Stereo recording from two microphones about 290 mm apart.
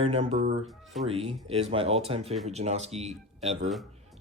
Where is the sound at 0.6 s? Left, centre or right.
Centre.